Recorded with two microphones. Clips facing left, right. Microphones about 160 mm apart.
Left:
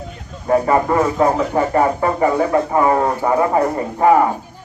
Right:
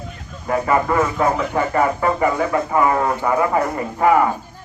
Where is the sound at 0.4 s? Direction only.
35° left (ahead or behind).